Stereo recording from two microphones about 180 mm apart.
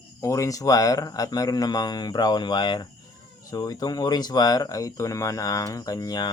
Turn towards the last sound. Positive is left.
turn(degrees=20)  # may be behind; listen again after turning